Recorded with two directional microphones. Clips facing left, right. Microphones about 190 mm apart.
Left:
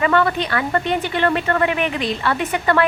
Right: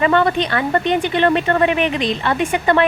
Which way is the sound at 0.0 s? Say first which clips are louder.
Right 2 dB; 25° right (ahead or behind).